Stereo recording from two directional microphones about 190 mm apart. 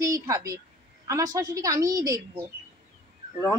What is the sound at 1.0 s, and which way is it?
A woman's voice, 15° right (ahead or behind).